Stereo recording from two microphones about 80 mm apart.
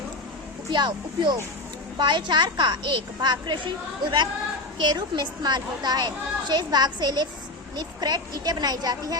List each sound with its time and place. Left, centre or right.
0.7 s a woman's voice: right
4.8 s speech: right